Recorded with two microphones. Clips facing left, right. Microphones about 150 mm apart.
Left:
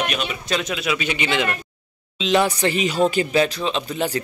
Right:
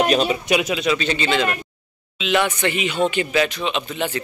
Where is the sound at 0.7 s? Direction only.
10° left (ahead or behind).